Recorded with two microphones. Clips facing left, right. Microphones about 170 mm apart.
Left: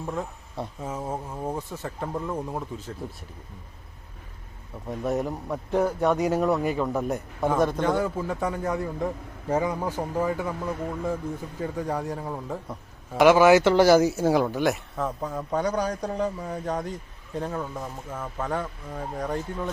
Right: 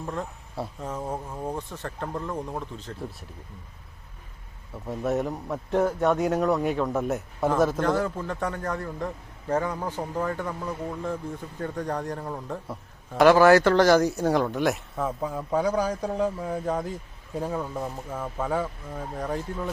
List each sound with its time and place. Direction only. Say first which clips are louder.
0.0 s a sound: left 1 dB; 5° left (ahead or behind)
0.8 s speech: left 1 dB; 5° left (ahead or behind)
4.9 s speech: even; centre (ahead or behind)
11.6 s speech: left 1 dB; 5° left (ahead or behind)
13.2 s speech: even; 15° left (ahead or behind)
13.7 s speech: left 1 dB; 10° left (ahead or behind)